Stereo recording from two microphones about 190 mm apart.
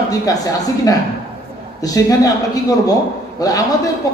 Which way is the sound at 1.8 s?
20° left (ahead or behind).